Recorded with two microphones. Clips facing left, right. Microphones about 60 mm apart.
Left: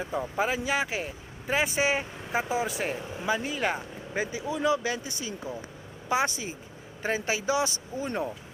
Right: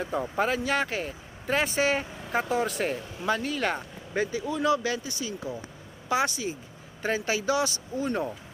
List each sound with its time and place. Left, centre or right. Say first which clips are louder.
0.0 s speech: right 1 dB; centre; by 8.2 s left